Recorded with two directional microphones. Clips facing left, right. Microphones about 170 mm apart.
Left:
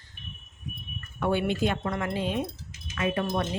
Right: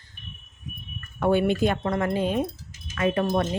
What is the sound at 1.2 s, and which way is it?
Speech, 45° right (ahead or behind).